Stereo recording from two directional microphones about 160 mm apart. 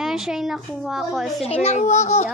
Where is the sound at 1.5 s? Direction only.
40° left (ahead or behind).